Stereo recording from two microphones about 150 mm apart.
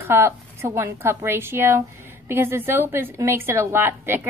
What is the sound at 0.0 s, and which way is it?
A woman's voice, 15° right (ahead or behind).